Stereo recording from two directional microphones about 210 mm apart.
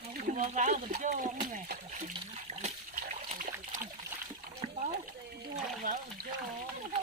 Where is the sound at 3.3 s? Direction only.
40° right (ahead or behind).